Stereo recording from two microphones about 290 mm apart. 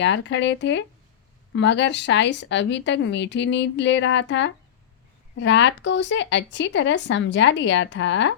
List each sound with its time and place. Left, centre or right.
0.0 s speech: left